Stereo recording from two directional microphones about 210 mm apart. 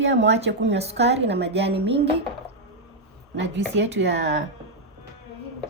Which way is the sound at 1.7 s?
25° right (ahead or behind).